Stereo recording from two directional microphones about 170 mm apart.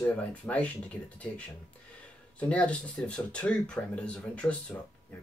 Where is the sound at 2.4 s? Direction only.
5° left (ahead or behind).